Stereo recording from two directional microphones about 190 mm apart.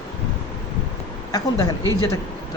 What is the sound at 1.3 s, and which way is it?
Speech, 20° left (ahead or behind).